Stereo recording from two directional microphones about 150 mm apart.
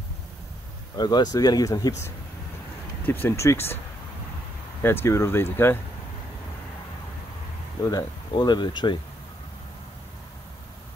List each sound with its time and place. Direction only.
0.9 s speech: 30° left (ahead or behind)
4.8 s speech: 15° left (ahead or behind)
7.8 s speech: 25° left (ahead or behind)